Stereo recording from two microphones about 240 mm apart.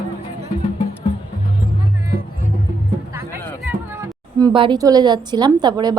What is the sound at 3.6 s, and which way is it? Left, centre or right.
A woman's voice, centre.